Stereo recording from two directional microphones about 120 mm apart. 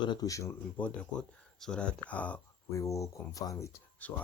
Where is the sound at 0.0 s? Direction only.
35° left (ahead or behind).